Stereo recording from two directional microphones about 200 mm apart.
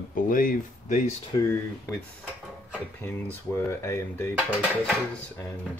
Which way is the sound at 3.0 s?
10° left (ahead or behind).